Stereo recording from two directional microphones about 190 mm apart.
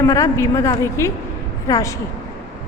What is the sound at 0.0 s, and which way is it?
A woman's voice, 15° left (ahead or behind).